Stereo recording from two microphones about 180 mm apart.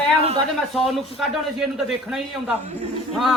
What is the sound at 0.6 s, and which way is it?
A woman's voice, centre (ahead or behind).